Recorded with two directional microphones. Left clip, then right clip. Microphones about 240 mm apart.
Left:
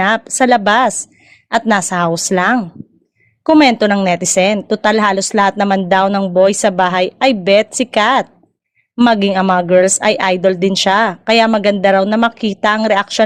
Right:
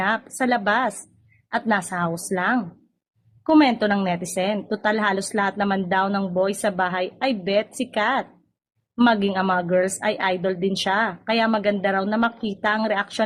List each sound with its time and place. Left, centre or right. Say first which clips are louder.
0.0 s speech: left 10 dB; left